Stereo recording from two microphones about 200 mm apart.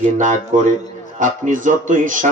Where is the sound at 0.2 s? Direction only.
40° right (ahead or behind).